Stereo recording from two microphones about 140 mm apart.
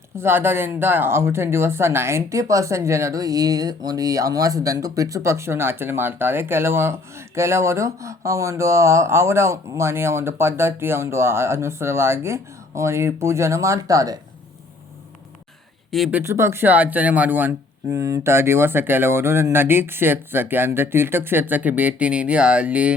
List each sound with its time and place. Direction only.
0.2 s speech: 15° right (ahead or behind)
16.1 s speech: 20° right (ahead or behind)
17.9 s speech: 25° right (ahead or behind)